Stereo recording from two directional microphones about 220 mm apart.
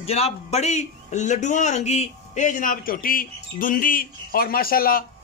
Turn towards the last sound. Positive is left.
turn(degrees=40)  # may be behind; listen again after turning